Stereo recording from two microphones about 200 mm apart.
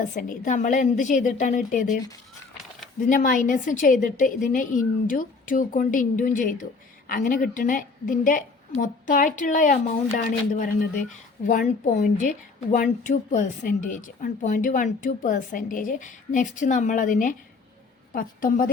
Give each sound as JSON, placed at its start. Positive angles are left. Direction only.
{"t": 0.0, "sound": "a woman's voice", "side_deg": 40}
{"t": 3.1, "sound": "a woman's voice", "side_deg": 40}